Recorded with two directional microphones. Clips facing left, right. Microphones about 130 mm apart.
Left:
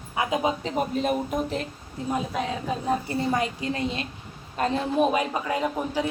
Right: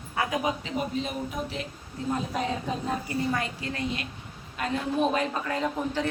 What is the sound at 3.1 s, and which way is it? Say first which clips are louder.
Speech: left 3 dB; 25° left (ahead or behind).